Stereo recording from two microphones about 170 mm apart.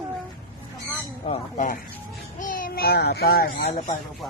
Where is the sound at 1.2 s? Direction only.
40° left (ahead or behind).